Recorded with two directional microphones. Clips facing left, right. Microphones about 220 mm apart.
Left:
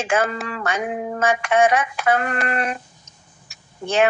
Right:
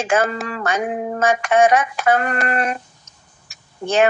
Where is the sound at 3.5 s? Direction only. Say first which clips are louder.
Right 3 dB; 45° right (ahead or behind).